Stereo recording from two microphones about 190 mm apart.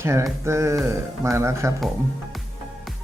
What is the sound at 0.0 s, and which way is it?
Speech, 15° right (ahead or behind).